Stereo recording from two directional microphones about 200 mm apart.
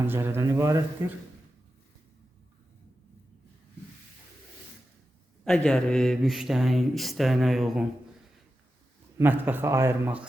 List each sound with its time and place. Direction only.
0.1 s speech: 10° right (ahead or behind)
5.5 s speech: 5° left (ahead or behind)
9.1 s speech: 10° right (ahead or behind)